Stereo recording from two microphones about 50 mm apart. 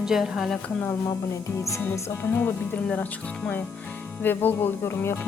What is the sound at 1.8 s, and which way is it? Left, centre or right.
Music, left.